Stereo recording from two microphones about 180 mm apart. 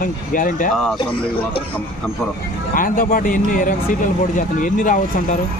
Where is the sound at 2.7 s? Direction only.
50° left (ahead or behind).